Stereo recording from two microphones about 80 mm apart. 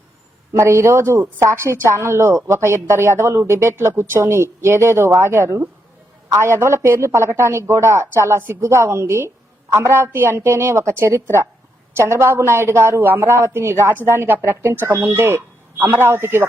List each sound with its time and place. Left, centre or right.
0.5 s a woman's voice: right